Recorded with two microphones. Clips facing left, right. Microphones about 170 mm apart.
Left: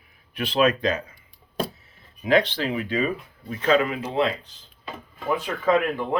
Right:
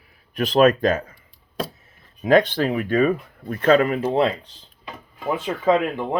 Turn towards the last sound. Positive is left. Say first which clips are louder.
# right 2 dB
turn(degrees=-20)  # may be behind; listen again after turning